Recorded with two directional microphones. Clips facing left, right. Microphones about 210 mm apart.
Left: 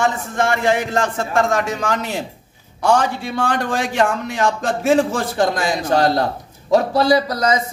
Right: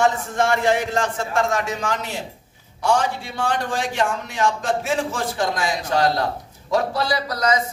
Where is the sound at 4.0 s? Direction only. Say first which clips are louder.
Left 4 dB; 50° left (ahead or behind).